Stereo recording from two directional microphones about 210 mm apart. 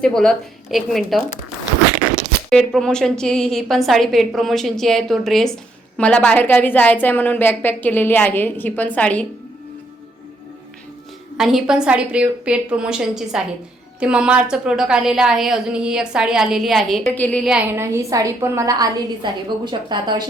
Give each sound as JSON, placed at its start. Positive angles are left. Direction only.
{"t": 0.0, "sound": "a woman's voice", "side_deg": 5}
{"t": 2.5, "sound": "a woman's voice", "side_deg": 5}
{"t": 11.3, "sound": "a woman's voice", "side_deg": 0}